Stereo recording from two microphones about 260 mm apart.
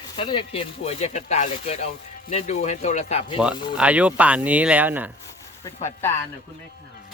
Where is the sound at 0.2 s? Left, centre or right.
Centre.